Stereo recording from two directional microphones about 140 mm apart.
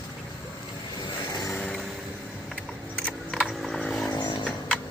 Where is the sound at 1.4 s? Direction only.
10° left (ahead or behind).